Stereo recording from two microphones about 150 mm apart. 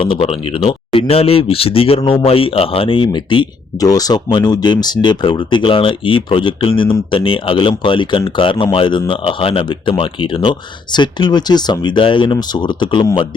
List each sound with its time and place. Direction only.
0.0 s speech: 35° left (ahead or behind)